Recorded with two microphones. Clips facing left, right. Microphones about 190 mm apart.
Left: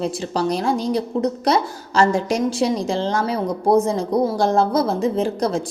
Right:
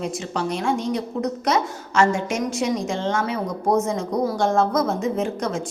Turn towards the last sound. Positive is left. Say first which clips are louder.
# left 4 dB
turn(degrees=35)  # may be behind; listen again after turning